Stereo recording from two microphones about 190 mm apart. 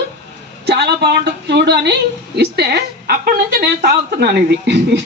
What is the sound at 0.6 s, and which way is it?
A woman's voice, 60° right (ahead or behind).